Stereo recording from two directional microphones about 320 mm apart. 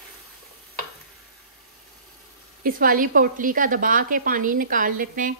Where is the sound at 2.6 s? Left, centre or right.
Right.